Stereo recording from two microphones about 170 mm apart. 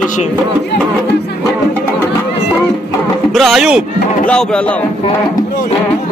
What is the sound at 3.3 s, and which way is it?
Speech, centre (ahead or behind).